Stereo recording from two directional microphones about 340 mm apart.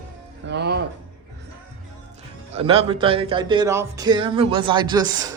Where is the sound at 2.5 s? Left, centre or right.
Centre.